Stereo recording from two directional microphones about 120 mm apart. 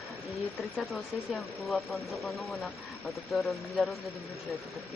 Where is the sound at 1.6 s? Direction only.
Centre (ahead or behind).